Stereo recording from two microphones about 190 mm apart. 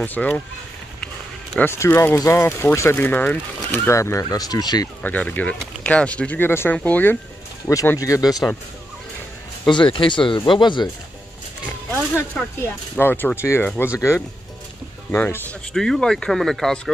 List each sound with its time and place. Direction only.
0.0 s speech: 10° left (ahead or behind)
5.0 s speech: 10° left (ahead or behind)
9.7 s speech: 25° left (ahead or behind)
12.4 s speech: 5° left (ahead or behind)